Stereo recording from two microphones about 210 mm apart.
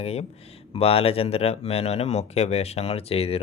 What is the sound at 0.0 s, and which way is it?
Speech, 30° left (ahead or behind).